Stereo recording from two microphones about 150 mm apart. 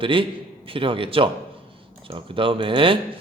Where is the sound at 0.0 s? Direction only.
35° right (ahead or behind).